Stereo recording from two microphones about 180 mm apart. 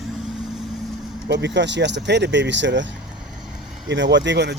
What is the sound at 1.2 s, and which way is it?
Speech, 75° right (ahead or behind).